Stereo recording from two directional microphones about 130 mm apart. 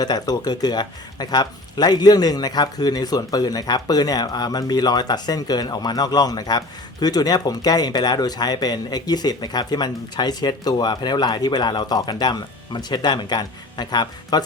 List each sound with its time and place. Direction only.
0.0 s speech: 30° left (ahead or behind)